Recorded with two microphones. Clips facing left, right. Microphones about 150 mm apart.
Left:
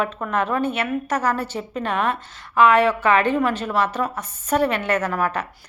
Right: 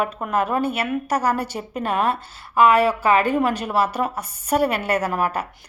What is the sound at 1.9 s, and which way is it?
Speech, 35° right (ahead or behind).